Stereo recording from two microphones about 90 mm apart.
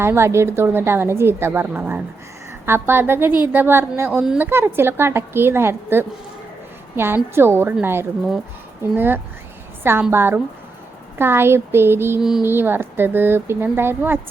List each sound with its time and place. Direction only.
0.0 s a woman's voice: 30° right (ahead or behind)